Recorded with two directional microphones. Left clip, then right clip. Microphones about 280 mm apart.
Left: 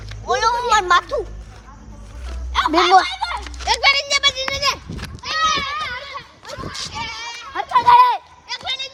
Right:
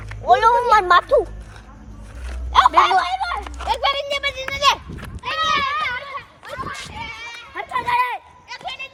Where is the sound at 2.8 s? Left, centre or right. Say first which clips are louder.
Left 2 dB; centre.